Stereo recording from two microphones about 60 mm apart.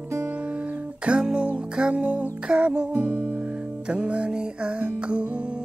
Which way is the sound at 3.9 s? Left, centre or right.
Centre.